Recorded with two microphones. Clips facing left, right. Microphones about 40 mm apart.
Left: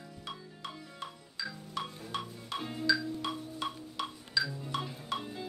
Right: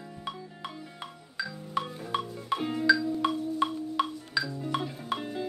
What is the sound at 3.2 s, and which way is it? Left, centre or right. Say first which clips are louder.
Chirp tone: right 11 dB; right.